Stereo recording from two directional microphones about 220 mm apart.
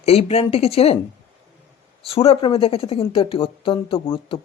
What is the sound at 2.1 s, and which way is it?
Speech, 25° left (ahead or behind).